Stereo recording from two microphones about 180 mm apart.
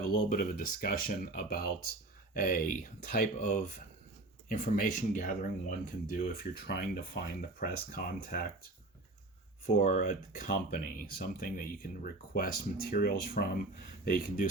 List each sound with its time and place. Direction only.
0.3 s speech: 55° left (ahead or behind)
9.6 s speech: 45° left (ahead or behind)